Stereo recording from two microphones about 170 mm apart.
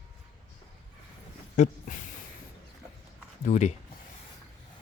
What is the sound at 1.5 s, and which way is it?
Speech, 45° left (ahead or behind).